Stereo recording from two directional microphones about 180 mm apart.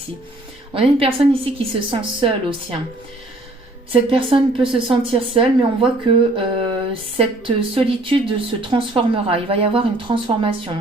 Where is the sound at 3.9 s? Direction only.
30° right (ahead or behind).